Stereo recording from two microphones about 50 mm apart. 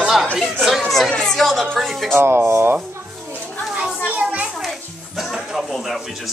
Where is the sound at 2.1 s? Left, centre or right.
Right.